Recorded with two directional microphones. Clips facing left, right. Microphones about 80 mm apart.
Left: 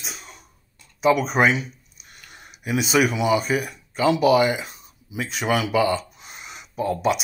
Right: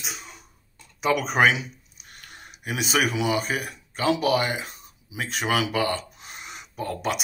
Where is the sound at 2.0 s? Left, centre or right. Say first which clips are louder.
Even; right.